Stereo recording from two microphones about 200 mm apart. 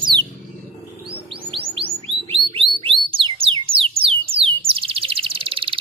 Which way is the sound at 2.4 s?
25° right (ahead or behind).